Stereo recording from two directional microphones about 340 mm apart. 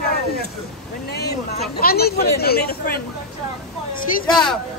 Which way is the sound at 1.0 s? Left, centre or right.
Left.